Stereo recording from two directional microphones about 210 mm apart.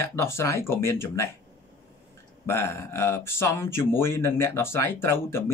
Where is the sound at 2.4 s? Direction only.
10° left (ahead or behind).